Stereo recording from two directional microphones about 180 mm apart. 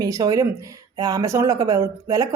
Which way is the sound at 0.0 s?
20° right (ahead or behind).